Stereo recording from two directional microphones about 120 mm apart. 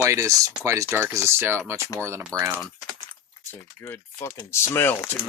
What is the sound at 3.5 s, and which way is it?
Speech, 15° left (ahead or behind).